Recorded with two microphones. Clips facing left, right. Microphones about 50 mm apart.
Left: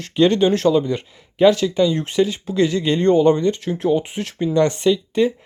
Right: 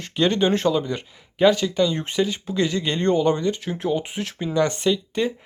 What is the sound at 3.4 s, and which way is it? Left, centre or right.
Speech, centre.